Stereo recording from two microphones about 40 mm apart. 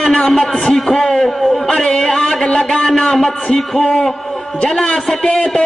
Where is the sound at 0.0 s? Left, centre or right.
Centre.